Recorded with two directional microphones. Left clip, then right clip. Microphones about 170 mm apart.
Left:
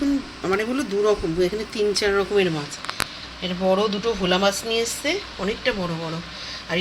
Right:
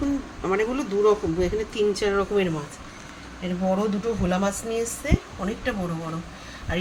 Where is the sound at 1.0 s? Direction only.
30° left (ahead or behind).